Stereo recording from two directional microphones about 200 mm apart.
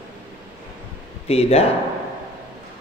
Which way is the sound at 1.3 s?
30° left (ahead or behind).